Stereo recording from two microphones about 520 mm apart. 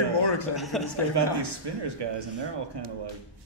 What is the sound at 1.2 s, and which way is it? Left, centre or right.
A man's voice, right.